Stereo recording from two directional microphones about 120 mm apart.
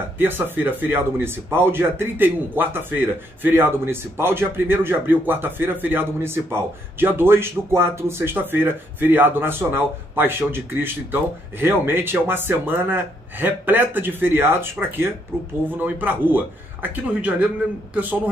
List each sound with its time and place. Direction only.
0.2 s speech: 15° right (ahead or behind)